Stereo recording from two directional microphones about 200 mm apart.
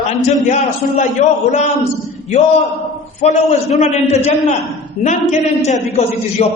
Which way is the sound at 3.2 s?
35° left (ahead or behind).